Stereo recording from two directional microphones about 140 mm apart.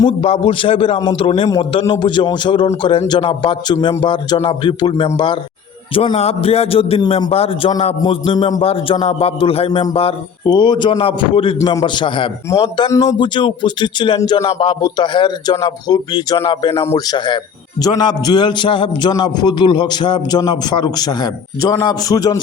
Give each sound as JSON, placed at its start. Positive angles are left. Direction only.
{"t": 0.2, "sound": "a man's voice", "side_deg": 45}
{"t": 10.4, "sound": "a man's voice", "side_deg": 30}
{"t": 11.7, "sound": "a man's voice", "side_deg": 25}
{"t": 12.0, "sound": "a man's voice", "side_deg": 40}
{"t": 12.5, "sound": "a man's voice", "side_deg": 30}
{"t": 16.8, "sound": "a man's voice", "side_deg": 20}
{"t": 17.2, "sound": "a man's voice", "side_deg": 30}